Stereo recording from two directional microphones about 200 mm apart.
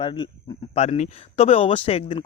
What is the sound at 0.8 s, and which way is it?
Speech, 35° left (ahead or behind).